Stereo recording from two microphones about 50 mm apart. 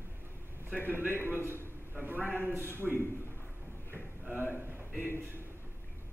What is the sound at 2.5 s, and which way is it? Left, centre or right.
Speech, right.